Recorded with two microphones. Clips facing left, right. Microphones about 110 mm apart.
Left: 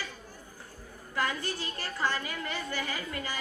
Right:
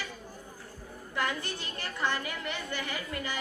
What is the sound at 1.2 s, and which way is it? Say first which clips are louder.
A woman's voice: left 1 dB; 20° right (ahead or behind).